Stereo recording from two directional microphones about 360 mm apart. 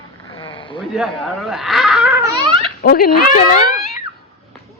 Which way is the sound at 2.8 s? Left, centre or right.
Left.